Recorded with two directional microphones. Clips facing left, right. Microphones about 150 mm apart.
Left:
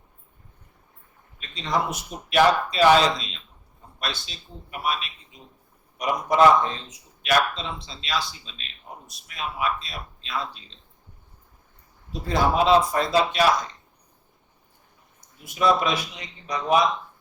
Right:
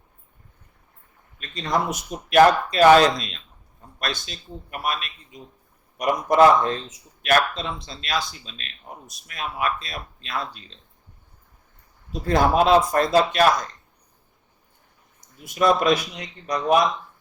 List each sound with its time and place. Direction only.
1.9 s speech: 50° right (ahead or behind)
12.3 s speech: 50° right (ahead or behind)
15.5 s speech: 50° right (ahead or behind)